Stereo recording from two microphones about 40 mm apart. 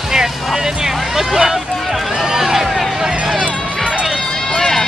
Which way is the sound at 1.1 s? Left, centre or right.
Centre.